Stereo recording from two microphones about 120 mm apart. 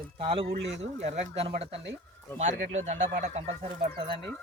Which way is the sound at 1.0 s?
65° right (ahead or behind).